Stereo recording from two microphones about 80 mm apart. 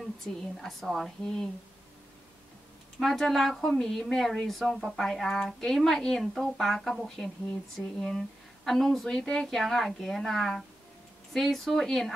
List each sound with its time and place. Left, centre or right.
0.0 s a woman's voice: centre
3.0 s a woman's voice: centre